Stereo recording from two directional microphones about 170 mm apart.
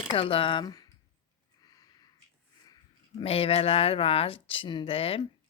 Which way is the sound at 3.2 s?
35° left (ahead or behind).